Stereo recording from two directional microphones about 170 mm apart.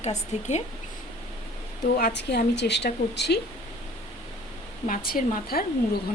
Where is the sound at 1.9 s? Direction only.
65° left (ahead or behind); by 3.4 s 80° left.